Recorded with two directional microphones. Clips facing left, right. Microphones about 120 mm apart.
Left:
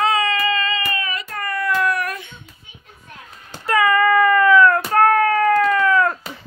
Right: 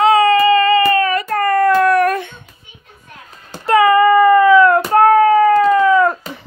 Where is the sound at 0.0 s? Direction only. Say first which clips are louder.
Right 9 dB; 35° right (ahead or behind).